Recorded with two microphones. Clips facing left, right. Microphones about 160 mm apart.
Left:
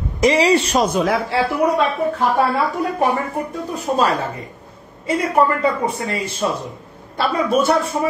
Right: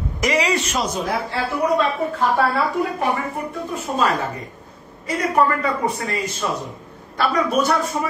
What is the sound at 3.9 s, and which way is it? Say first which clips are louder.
A man's voice: left 1 dB; 35° left (ahead or behind).